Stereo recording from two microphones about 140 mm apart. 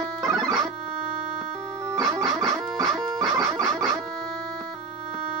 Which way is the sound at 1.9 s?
25° right (ahead or behind).